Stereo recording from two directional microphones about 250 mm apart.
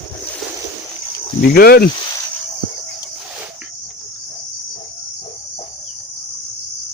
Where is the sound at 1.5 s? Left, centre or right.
Left.